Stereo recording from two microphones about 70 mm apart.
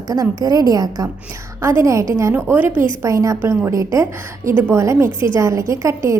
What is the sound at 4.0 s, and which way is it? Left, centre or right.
A woman's voice, right.